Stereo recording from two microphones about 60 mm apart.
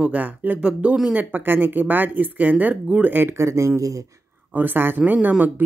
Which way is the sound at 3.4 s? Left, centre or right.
Right.